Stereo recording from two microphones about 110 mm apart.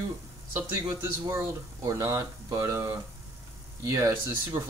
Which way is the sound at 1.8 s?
25° right (ahead or behind).